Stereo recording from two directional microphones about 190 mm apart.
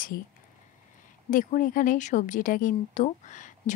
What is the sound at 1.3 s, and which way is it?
Speech, 45° left (ahead or behind).